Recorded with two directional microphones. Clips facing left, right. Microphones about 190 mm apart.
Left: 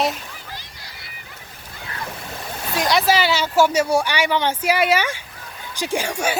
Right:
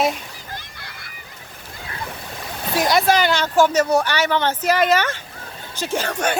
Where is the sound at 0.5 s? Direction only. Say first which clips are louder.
Right 2 dB; 55° right (ahead or behind).